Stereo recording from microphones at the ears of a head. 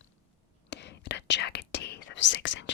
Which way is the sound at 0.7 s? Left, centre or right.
Left.